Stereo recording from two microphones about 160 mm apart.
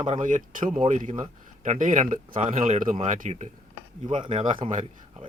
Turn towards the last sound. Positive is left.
turn(degrees=-45)  # may be behind; listen again after turning